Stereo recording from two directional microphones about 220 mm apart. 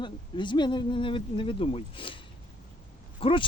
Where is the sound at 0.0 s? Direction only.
20° left (ahead or behind).